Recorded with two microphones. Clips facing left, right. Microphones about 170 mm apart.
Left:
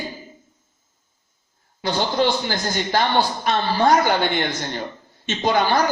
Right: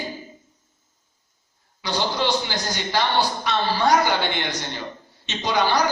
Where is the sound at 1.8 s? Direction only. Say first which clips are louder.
Left 4 dB; 50° left (ahead or behind).